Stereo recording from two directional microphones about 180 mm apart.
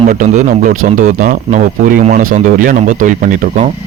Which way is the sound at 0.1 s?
45° right (ahead or behind).